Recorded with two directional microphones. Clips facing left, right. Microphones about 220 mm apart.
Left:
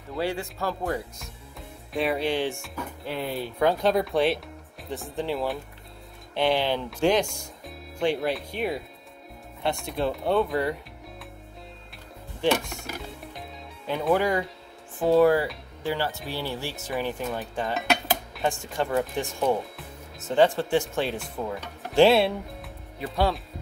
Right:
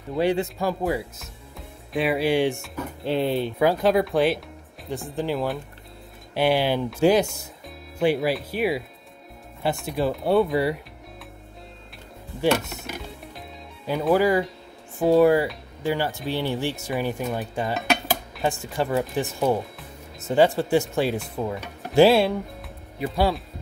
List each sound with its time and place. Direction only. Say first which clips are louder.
0.1 s speech: right 6 dB; 20° right (ahead or behind)
3.1 s speech: right 8 dB; 25° right (ahead or behind)
3.5 s speech: right 1 dB; 5° right (ahead or behind)
12.4 s music: right 2 dB; 5° right (ahead or behind)
15.0 s speech: right 2 dB; 15° right (ahead or behind)
22.9 s speech: right 3 dB; 10° right (ahead or behind)